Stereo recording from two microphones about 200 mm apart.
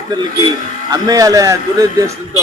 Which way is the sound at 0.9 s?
20° right (ahead or behind).